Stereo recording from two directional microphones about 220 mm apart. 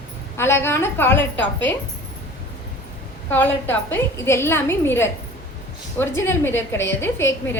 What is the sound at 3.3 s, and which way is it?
A woman's voice, 10° left (ahead or behind).